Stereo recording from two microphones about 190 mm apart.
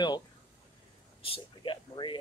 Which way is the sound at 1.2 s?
30° left (ahead or behind).